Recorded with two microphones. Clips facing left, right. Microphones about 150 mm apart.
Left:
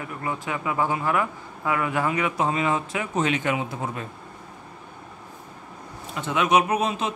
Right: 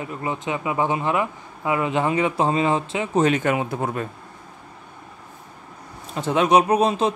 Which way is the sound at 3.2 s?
45° right (ahead or behind).